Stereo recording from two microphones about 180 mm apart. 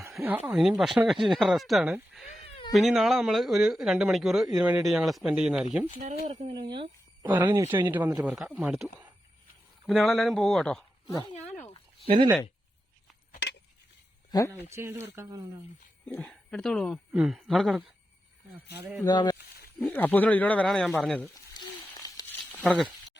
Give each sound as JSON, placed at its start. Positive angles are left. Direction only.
{"t": 0.2, "sound": "speech", "side_deg": -10}
{"t": 2.5, "sound": "cat", "side_deg": 30}
{"t": 2.7, "sound": "speech", "side_deg": 0}
{"t": 6.0, "sound": "speech", "side_deg": -40}
{"t": 7.3, "sound": "speech", "side_deg": -10}
{"t": 12.0, "sound": "speech", "side_deg": -35}
{"t": 14.3, "sound": "speech", "side_deg": 20}
{"t": 14.7, "sound": "speech", "side_deg": -15}
{"t": 16.0, "sound": "speech", "side_deg": 5}
{"t": 19.0, "sound": "speech", "side_deg": 25}
{"t": 19.9, "sound": "speech", "side_deg": 10}
{"t": 21.6, "sound": "a sound", "side_deg": 20}
{"t": 22.6, "sound": "speech", "side_deg": 0}